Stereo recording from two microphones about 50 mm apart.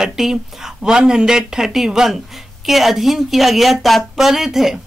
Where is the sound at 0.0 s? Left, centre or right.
Centre.